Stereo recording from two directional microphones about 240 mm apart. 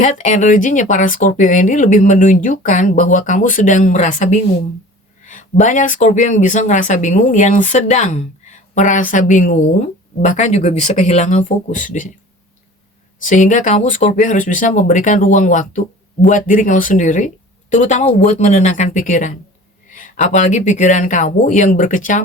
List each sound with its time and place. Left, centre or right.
0.0 s speech: left
13.2 s speech: left